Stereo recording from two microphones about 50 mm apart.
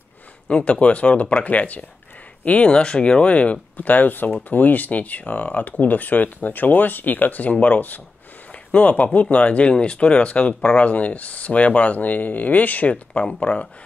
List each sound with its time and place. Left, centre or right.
0.5 s speech: left
3.7 s speech: left